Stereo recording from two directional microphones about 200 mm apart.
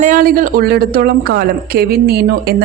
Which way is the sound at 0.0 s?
45° right (ahead or behind).